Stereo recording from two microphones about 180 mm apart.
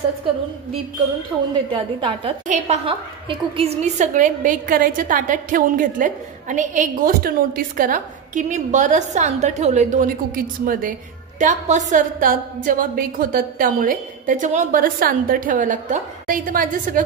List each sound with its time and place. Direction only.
1.3 s a woman's voice: 15° right (ahead or behind)
1.7 s a woman's voice: 30° right (ahead or behind)
2.4 s a woman's voice: 40° right (ahead or behind)